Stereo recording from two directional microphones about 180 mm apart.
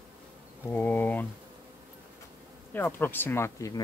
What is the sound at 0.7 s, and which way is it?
Speech, 10° left (ahead or behind).